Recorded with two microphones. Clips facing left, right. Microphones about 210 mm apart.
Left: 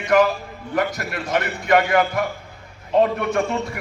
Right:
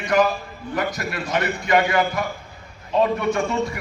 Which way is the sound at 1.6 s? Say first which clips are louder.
Left 3 dB; 55° left (ahead or behind).